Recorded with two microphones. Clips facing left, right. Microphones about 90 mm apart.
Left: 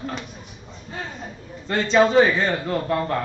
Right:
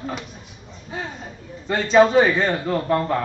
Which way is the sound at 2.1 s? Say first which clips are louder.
Even; 5° right (ahead or behind).